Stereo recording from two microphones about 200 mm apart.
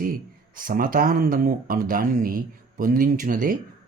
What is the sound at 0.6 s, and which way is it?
Speech, 45° right (ahead or behind).